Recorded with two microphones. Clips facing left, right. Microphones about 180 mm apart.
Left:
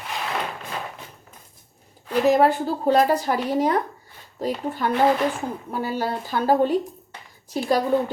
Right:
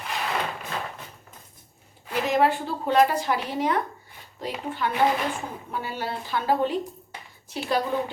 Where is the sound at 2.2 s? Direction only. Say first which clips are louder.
Left 5 dB; 40° left (ahead or behind).